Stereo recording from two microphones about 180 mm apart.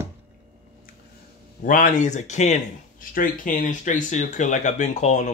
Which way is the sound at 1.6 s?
45° left (ahead or behind).